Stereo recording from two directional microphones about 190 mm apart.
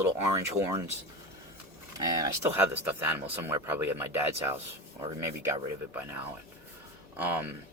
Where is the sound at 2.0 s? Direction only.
20° right (ahead or behind).